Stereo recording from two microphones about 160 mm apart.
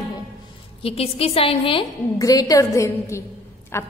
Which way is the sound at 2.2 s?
20° left (ahead or behind).